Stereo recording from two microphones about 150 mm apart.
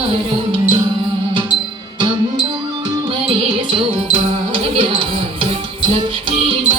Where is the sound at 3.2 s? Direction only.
35° right (ahead or behind).